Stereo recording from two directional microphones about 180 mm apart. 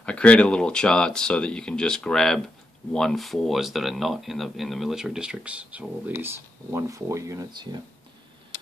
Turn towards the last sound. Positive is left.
turn(degrees=-20)  # may be behind; listen again after turning